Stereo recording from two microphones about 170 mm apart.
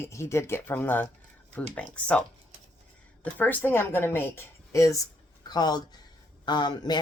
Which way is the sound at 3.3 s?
10° left (ahead or behind).